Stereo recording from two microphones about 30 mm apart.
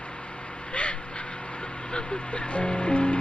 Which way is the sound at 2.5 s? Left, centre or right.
Left.